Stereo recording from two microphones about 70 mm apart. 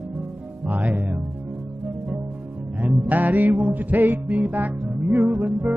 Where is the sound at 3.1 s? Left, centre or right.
Right.